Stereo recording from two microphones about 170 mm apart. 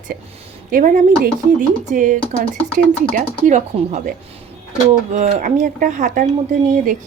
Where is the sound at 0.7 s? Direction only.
50° right (ahead or behind).